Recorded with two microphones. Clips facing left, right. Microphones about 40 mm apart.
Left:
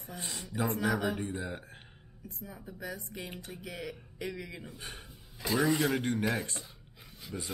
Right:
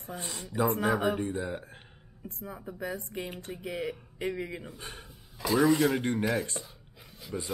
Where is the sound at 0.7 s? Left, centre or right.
Right.